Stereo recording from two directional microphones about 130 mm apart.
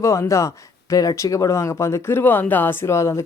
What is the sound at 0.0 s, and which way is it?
Speech, 20° left (ahead or behind).